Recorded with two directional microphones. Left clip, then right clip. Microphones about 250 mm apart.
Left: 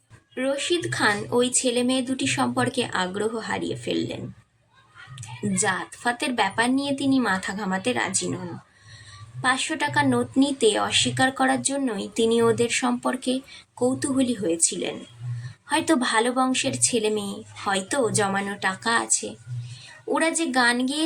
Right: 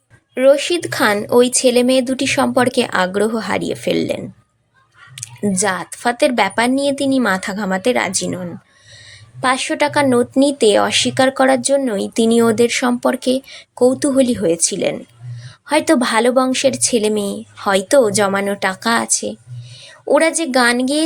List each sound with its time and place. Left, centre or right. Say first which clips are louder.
0.3 s speech: right 12 dB; right
9.4 s speech: right 8 dB; right